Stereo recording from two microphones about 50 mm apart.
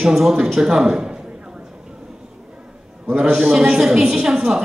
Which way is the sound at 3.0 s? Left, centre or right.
Right.